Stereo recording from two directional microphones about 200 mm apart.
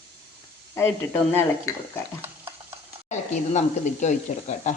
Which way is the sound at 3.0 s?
35° left (ahead or behind).